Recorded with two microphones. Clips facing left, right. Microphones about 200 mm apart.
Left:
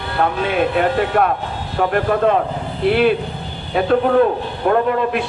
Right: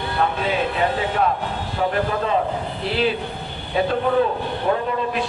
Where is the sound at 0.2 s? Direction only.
55° left (ahead or behind).